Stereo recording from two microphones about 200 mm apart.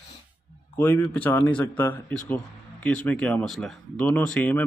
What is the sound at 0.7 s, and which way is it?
Speech, 10° left (ahead or behind).